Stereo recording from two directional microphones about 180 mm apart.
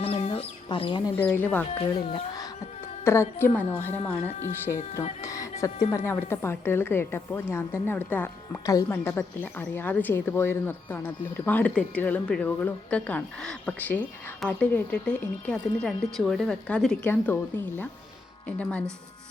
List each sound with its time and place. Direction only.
0.0 s chicken: 35° left (ahead or behind)
1.1 s a woman's voice: 10° left (ahead or behind)
1.8 s speech: 30° left (ahead or behind)
3.0 s a woman's voice: 15° left (ahead or behind)
5.2 s a woman's voice: 15° left (ahead or behind)
18.4 s a woman's voice: 5° left (ahead or behind)